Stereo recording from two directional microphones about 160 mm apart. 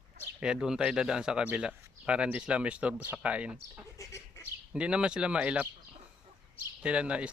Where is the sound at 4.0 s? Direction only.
20° left (ahead or behind).